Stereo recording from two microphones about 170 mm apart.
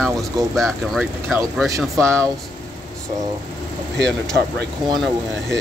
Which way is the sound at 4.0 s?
5° left (ahead or behind).